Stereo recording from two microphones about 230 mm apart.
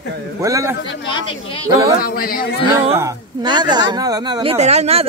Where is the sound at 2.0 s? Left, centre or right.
Left.